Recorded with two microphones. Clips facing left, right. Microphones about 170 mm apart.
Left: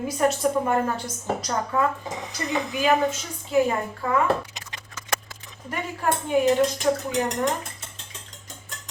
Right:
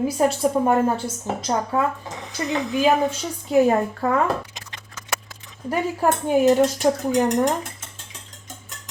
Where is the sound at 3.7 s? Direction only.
45° right (ahead or behind).